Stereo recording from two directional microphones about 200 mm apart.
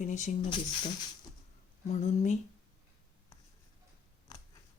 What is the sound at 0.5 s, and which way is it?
Speech, 25° left (ahead or behind).